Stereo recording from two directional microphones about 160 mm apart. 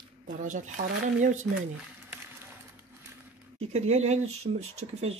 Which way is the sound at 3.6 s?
45° right (ahead or behind).